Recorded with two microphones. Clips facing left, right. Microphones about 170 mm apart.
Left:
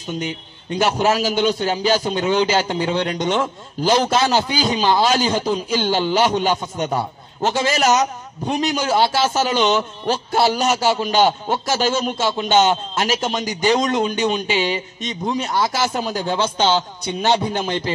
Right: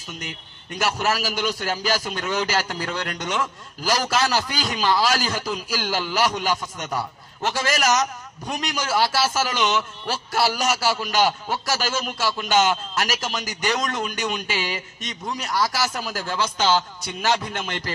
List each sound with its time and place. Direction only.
0.7 s a man's voice: 30° left (ahead or behind)